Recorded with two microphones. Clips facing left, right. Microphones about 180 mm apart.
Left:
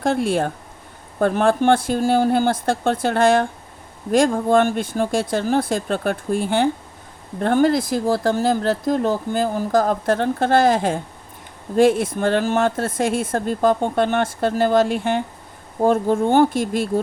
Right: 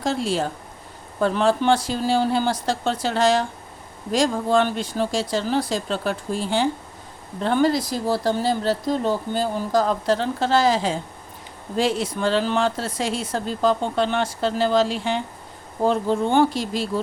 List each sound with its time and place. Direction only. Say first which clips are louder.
0.0 s speech: left 4 dB; 55° left (ahead or behind)